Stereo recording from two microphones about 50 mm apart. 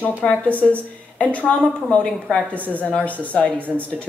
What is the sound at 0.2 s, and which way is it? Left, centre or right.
Speech, left.